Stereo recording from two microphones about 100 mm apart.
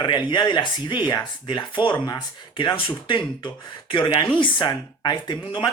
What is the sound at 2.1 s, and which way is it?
Speech, 45° left (ahead or behind).